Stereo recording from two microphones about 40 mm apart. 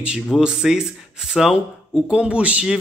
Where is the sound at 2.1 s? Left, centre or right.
Right.